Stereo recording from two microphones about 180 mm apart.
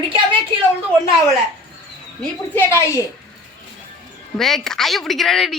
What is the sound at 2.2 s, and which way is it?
Speech, 15° left (ahead or behind).